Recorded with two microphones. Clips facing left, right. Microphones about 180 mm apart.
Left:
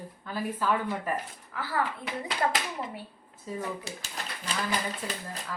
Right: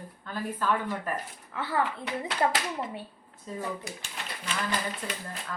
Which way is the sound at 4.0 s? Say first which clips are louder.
Even; 35° left (ahead or behind).